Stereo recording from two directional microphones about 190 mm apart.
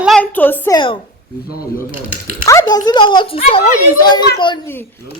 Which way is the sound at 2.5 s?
20° left (ahead or behind).